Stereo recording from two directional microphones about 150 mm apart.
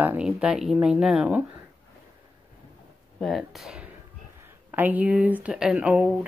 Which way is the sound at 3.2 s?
Centre (ahead or behind).